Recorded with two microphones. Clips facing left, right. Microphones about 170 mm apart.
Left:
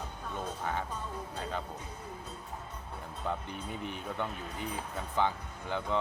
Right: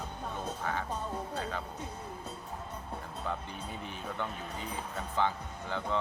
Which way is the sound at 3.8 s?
15° left (ahead or behind).